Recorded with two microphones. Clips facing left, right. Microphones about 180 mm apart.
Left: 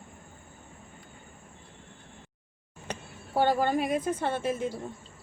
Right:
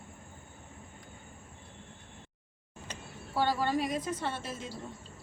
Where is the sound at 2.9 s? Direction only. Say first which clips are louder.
Left 6 dB; 50° left (ahead or behind).